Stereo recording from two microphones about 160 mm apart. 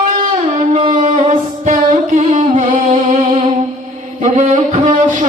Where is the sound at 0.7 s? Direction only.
35° right (ahead or behind).